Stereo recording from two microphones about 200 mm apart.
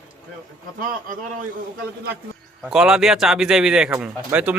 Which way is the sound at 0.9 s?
40° right (ahead or behind).